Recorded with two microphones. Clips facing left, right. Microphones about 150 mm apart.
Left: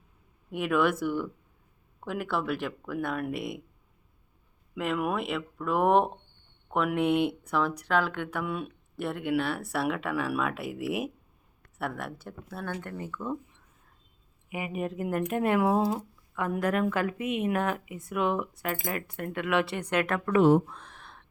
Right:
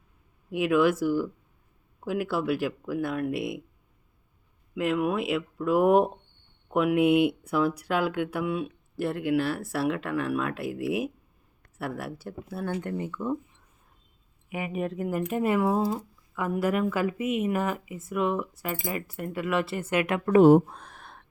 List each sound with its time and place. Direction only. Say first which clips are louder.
0.5 s speech: right 3 dB; centre (ahead or behind)
2.0 s speech: right 3 dB; 5° right (ahead or behind)
4.7 s speech: right 3 dB; centre (ahead or behind)
14.5 s speech: right 2 dB; 5° left (ahead or behind); by 20.2 s 10° right (ahead or behind)
20.2 s a sound: right 5 dB; 35° right (ahead or behind)